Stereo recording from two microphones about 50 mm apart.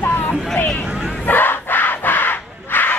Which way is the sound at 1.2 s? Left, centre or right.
Left.